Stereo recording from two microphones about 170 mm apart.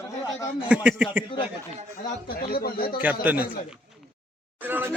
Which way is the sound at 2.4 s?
60° left (ahead or behind).